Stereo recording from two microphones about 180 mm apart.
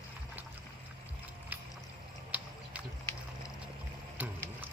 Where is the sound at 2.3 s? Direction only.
10° right (ahead or behind).